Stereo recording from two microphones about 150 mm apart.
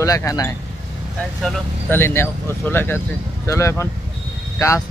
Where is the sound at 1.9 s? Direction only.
15° left (ahead or behind).